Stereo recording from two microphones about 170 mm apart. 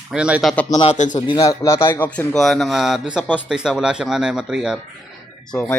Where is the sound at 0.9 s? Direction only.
45° left (ahead or behind).